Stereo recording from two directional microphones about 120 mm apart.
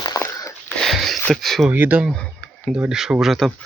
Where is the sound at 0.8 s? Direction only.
Centre (ahead or behind).